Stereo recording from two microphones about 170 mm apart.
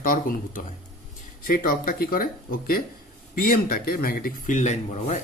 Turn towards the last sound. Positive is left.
turn(degrees=40)  # may be behind; listen again after turning